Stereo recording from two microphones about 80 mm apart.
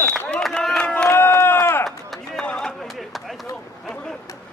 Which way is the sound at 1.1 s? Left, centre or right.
Left.